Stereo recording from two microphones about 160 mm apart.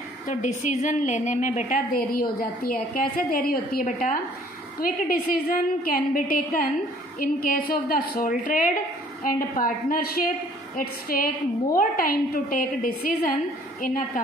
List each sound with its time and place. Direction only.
0.3 s a woman's voice: 50° left (ahead or behind)
1.9 s a woman's voice: 65° left (ahead or behind)